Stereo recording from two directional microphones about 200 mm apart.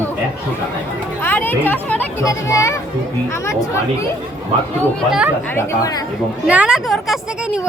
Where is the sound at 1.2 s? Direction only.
10° left (ahead or behind).